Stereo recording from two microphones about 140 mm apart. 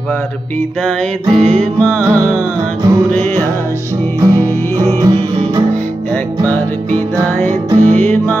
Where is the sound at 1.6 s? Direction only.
10° left (ahead or behind).